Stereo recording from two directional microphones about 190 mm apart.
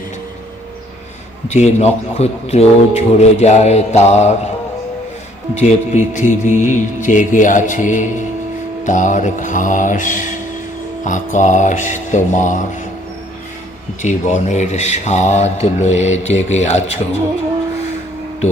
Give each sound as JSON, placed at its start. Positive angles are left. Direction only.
{"t": 1.5, "sound": "speech", "side_deg": 35}
{"t": 5.5, "sound": "speech", "side_deg": 35}
{"t": 8.8, "sound": "music", "side_deg": 40}
{"t": 11.0, "sound": "speech", "side_deg": 40}
{"t": 14.0, "sound": "speech", "side_deg": 40}